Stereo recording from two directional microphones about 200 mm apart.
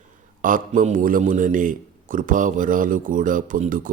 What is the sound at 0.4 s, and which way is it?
A man's voice, 40° right (ahead or behind).